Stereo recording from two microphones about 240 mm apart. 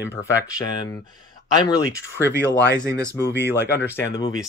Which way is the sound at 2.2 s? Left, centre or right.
Centre.